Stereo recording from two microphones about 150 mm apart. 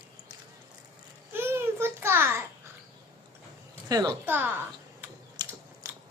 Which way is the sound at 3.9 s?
20° right (ahead or behind).